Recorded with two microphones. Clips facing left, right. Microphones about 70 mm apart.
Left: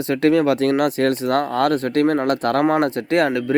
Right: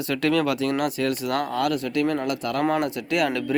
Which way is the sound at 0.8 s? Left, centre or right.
Left.